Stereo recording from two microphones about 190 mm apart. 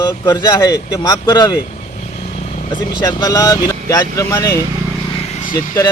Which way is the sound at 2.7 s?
25° left (ahead or behind).